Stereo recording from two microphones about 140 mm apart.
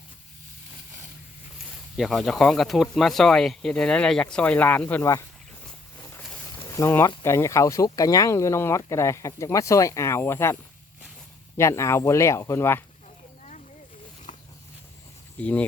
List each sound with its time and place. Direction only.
2.0 s speech: centre (ahead or behind); by 5.2 s 15° left (ahead or behind)
6.7 s speech: 20° left (ahead or behind)
14.3 s a sound: 60° left (ahead or behind)
15.4 s speech: 10° left (ahead or behind)